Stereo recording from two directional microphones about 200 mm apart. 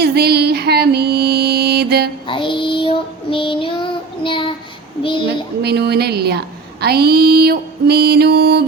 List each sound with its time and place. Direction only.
0.0 s music: 55° right (ahead or behind)
2.2 s child singing: 25° left (ahead or behind)
5.0 s a child's voice: 25° left (ahead or behind)
5.6 s mantra: 55° right (ahead or behind)